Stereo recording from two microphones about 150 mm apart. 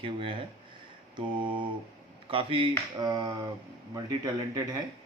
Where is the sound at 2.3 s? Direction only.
35° right (ahead or behind).